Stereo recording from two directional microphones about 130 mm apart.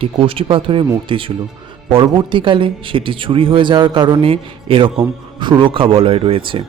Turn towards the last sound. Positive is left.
turn(degrees=-40)  # may be behind; listen again after turning